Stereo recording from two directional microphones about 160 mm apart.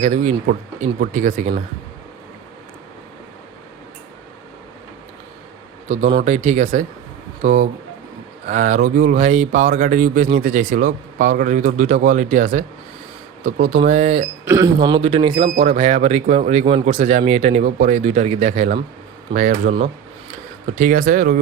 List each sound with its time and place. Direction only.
0.0 s speech: 45° right (ahead or behind)
6.2 s speech: 45° right (ahead or behind)
14.4 s speech: 20° right (ahead or behind); by 18.7 s 40° right (ahead or behind)
19.3 s speech: 55° right (ahead or behind)
20.7 s speech: 55° right (ahead or behind)